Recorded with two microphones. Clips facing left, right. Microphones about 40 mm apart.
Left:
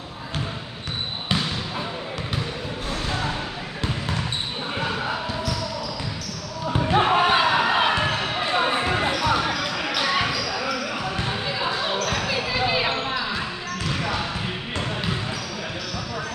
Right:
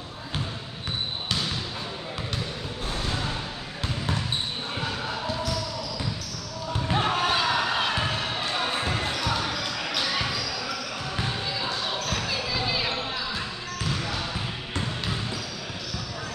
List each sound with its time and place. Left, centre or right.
4.7 s basketball bounce: left
6.7 s basketball bounce: left